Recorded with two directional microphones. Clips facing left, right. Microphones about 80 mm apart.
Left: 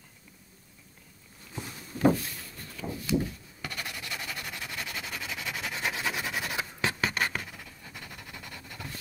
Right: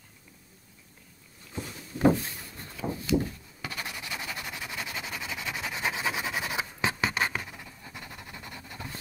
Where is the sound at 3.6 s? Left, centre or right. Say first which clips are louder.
Right 1 dB; centre.